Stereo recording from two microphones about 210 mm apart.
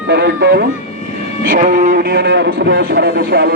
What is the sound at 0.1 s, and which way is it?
Speech, 50° right (ahead or behind).